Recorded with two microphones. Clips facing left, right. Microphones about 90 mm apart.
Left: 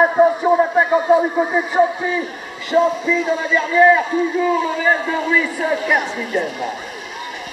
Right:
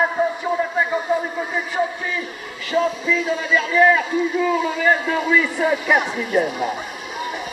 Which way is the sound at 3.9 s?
15° left (ahead or behind).